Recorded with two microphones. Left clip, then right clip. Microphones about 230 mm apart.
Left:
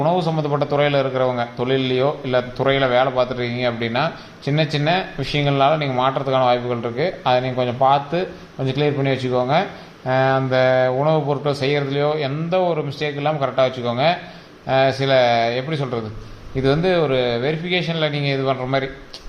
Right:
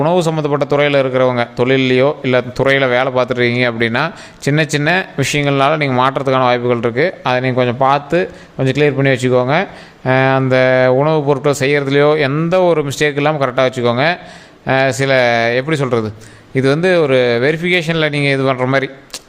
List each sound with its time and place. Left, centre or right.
0.0 s a man's voice: right